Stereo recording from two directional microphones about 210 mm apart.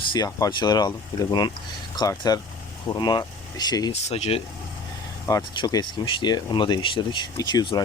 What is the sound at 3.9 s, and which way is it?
Speech, 30° left (ahead or behind).